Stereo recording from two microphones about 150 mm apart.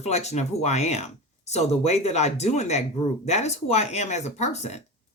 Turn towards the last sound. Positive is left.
turn(degrees=45)  # may be behind; listen again after turning